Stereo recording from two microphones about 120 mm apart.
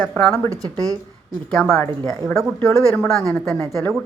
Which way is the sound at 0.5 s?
30° right (ahead or behind).